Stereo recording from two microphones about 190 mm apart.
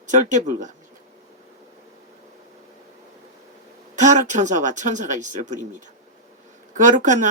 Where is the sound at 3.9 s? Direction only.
40° right (ahead or behind).